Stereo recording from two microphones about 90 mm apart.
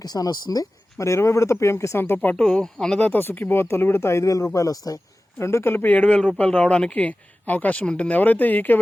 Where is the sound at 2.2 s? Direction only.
10° left (ahead or behind); by 5.0 s 40° left (ahead or behind).